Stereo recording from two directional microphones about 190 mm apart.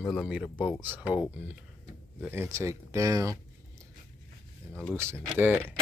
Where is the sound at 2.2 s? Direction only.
10° right (ahead or behind).